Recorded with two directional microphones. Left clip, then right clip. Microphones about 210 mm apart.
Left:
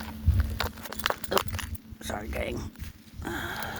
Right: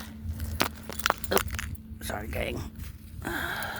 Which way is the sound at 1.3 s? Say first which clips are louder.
Left 1 dB; 30° right (ahead or behind).